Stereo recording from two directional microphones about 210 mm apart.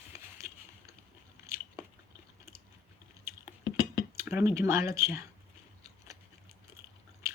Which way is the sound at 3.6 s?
20° left (ahead or behind).